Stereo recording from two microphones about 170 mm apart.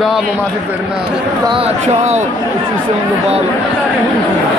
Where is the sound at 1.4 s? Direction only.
30° right (ahead or behind).